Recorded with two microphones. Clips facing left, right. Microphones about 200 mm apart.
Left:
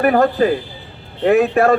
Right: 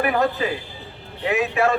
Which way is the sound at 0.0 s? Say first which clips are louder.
Left 7 dB; 50° left (ahead or behind).